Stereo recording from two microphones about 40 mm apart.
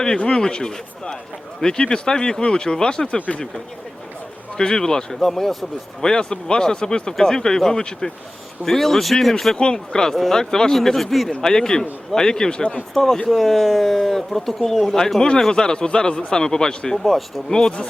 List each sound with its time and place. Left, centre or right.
0.3 s speech: centre
3.2 s speech: left
4.5 s speech: centre
5.2 s speech: centre
6.0 s speech: centre
9.6 s speech: left; by 11.3 s centre
11.3 s speech: centre
12.9 s speech: centre
17.0 s speech: centre
17.5 s speech: centre